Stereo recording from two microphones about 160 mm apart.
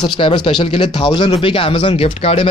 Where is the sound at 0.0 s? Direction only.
30° left (ahead or behind).